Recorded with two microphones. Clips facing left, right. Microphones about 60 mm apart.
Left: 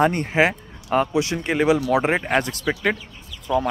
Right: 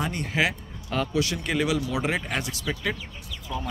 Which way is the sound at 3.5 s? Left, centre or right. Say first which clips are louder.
Left 12 dB; left.